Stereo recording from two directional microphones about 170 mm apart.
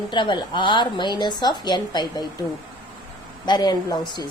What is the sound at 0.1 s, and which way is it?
A woman's voice, 25° left (ahead or behind).